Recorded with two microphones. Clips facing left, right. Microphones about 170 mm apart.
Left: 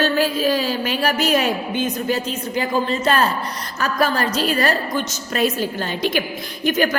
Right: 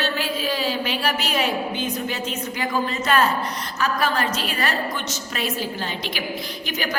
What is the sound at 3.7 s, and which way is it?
A woman's voice, 40° left (ahead or behind).